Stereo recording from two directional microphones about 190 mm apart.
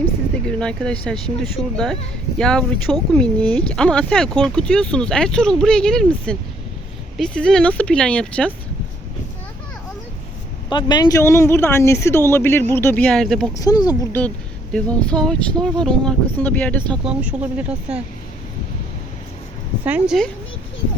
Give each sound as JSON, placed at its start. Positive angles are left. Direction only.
{"t": 0.4, "sound": "speech", "side_deg": 5}
{"t": 10.7, "sound": "speech", "side_deg": 25}
{"t": 13.6, "sound": "speech", "side_deg": 20}
{"t": 14.1, "sound": "speech", "side_deg": 5}
{"t": 19.8, "sound": "speech", "side_deg": -5}